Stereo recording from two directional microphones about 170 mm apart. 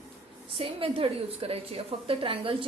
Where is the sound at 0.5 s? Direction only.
35° right (ahead or behind).